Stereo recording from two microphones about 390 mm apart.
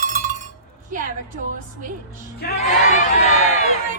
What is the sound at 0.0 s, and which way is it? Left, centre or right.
Cowbell, centre.